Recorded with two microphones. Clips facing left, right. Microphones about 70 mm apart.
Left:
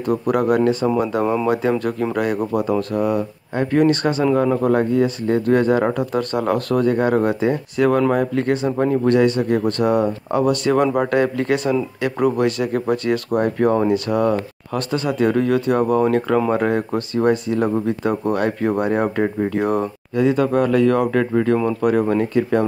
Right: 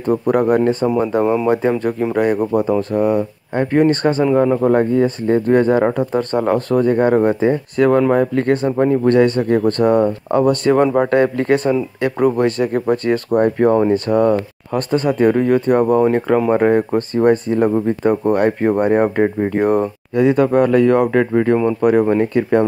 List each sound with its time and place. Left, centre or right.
0.1 s speech: right
0.8 s speech: right
4.2 s speech: centre
4.6 s speech: right
16.0 s speech: right